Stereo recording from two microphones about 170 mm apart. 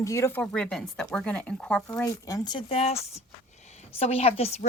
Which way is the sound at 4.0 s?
35° left (ahead or behind).